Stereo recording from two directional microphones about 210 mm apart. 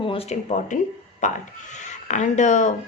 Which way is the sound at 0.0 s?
25° left (ahead or behind).